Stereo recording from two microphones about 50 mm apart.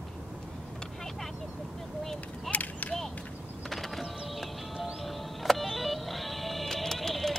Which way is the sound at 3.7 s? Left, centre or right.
Centre.